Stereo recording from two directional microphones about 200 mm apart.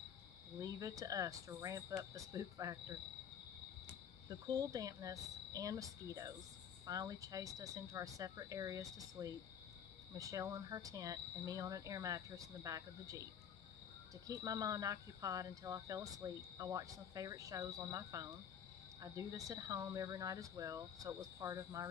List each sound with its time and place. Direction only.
0.6 s cricket: 15° right (ahead or behind)
4.3 s cricket: 15° right (ahead or behind)